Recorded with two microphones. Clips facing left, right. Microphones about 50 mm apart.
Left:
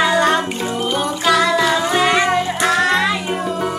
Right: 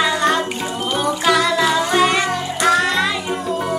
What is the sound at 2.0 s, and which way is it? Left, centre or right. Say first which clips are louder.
Music: left 1 dB; left.